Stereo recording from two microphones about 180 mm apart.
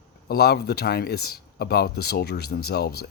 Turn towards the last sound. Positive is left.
turn(degrees=60)  # may be behind; listen again after turning